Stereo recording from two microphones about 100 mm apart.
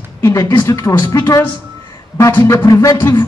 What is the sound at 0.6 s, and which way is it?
Speech, 40° left (ahead or behind).